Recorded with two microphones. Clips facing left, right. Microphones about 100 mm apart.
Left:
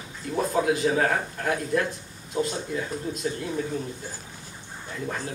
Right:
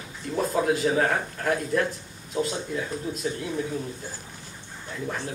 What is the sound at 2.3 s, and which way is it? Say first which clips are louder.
Speech: even; centre (ahead or behind).